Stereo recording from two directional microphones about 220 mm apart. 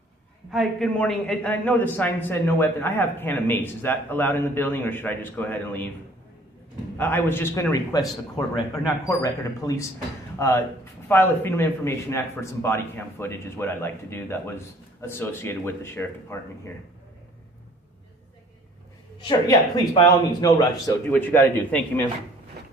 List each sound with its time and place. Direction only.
0.5 s a man's voice: centre (ahead or behind)
6.9 s a man's voice: 10° left (ahead or behind)
9.0 s a man's voice: 15° left (ahead or behind)
19.5 s a man's voice: 15° left (ahead or behind)